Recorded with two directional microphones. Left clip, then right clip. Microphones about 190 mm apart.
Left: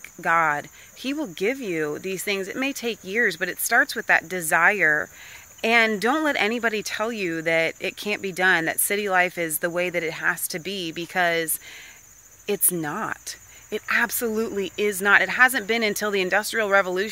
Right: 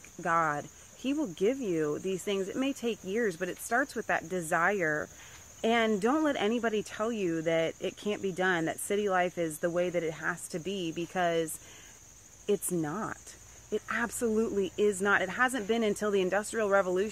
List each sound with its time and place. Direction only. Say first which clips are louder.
0.2 s speech: left 8 dB; 15° left (ahead or behind)